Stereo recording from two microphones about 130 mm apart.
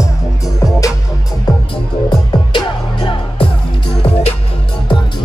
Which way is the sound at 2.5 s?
35° left (ahead or behind).